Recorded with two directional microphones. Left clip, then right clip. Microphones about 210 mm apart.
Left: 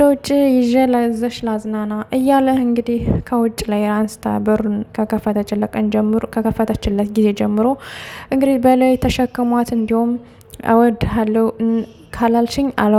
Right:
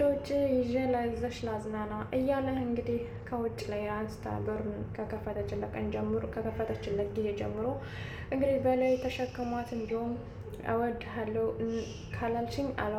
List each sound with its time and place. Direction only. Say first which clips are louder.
0.0 s a woman's voice: left 15 dB; 55° left (ahead or behind)